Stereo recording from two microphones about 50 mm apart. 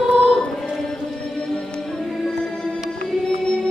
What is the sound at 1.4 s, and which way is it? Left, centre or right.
Music, centre.